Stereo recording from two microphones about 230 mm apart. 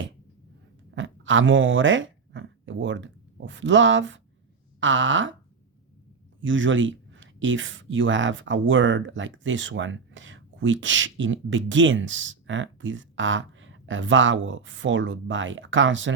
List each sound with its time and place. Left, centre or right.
0.9 s speech: right
6.4 s speech: right